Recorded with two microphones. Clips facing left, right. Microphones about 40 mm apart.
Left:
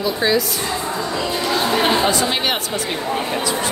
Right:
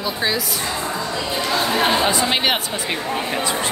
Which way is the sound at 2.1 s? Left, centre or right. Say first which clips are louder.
Even; right.